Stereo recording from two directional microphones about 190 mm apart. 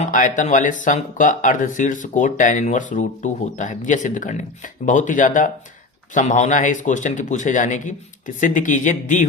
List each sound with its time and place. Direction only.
0.0 s speech: 40° left (ahead or behind)